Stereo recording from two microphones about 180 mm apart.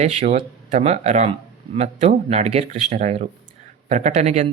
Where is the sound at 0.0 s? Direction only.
35° right (ahead or behind).